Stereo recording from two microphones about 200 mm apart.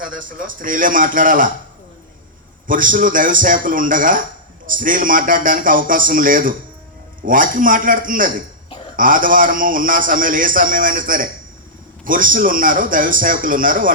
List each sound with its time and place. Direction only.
0.2 s speech: 45° right (ahead or behind)
2.6 s speech: 40° right (ahead or behind)